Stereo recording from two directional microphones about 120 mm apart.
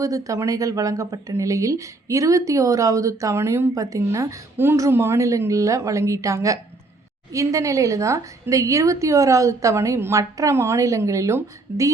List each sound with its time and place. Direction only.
0.0 s speech: 30° right (ahead or behind)